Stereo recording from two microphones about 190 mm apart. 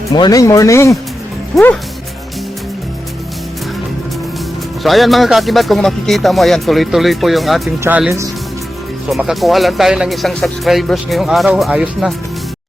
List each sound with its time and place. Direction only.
0.1 s speech: 20° left (ahead or behind)
1.5 s speech: centre (ahead or behind)
4.8 s speech: centre (ahead or behind)
9.0 s speech: centre (ahead or behind)